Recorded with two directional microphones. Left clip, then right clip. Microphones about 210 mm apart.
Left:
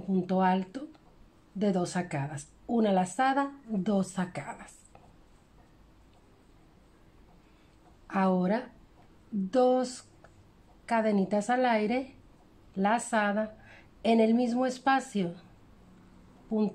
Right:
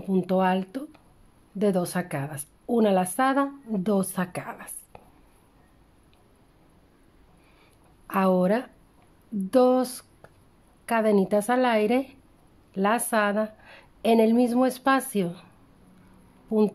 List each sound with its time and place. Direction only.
0.1 s a woman's voice: 30° right (ahead or behind)
8.1 s a woman's voice: 30° right (ahead or behind)
16.4 s speech: 35° right (ahead or behind)